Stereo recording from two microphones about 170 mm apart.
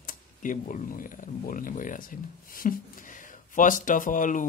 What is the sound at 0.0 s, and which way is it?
Speech, 50° left (ahead or behind).